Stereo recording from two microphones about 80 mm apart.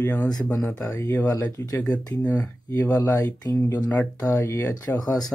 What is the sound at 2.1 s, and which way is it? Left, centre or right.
Speech, left.